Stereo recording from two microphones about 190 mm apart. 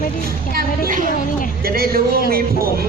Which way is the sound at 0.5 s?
45° right (ahead or behind).